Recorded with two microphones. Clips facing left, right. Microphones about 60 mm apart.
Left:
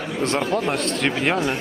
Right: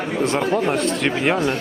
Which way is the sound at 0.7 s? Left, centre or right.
Centre.